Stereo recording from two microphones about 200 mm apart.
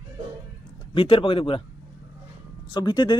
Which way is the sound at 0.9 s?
25° left (ahead or behind).